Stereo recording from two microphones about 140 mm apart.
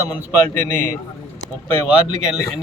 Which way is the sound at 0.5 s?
65° right (ahead or behind).